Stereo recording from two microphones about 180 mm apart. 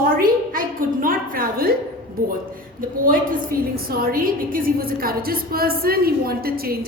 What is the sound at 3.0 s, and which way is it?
A woman's voice, 50° right (ahead or behind).